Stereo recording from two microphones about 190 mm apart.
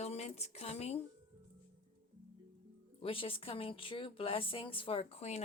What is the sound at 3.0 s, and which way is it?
Speech, 30° left (ahead or behind).